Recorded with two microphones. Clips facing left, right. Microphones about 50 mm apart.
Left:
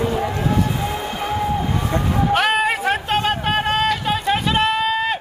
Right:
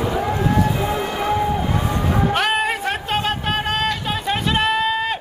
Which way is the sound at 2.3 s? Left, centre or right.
Centre.